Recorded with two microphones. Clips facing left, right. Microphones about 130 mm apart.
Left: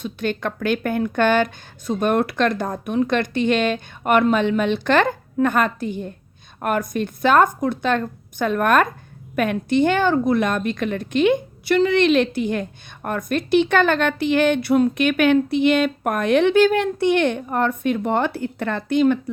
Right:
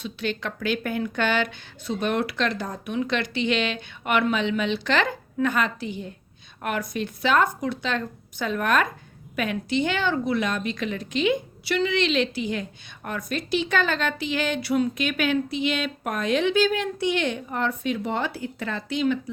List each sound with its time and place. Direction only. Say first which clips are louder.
0.0 s speech: left 5 dB; 50° left (ahead or behind)